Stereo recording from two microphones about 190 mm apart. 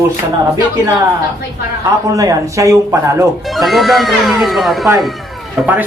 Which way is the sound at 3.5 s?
Centre (ahead or behind).